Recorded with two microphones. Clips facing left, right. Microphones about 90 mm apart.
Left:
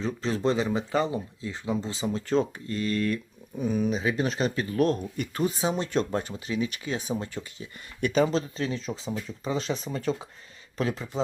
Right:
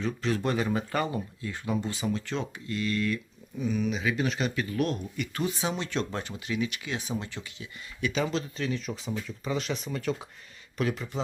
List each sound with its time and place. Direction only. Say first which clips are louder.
0.0 s speech: left 2 dB; 30° left (ahead or behind)
2.2 s speech: left 8 dB; 40° left (ahead or behind)